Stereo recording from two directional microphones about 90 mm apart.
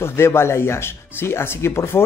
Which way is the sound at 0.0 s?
25° left (ahead or behind).